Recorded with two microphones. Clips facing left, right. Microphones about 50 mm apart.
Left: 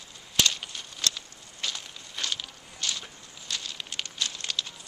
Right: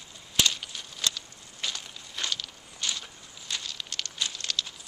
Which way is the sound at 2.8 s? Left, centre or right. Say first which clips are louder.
Even; centre.